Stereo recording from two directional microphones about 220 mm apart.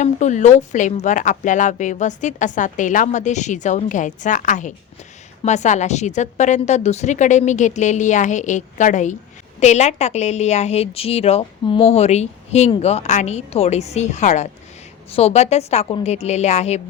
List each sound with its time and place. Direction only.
0.0 s a woman's voice: 35° left (ahead or behind)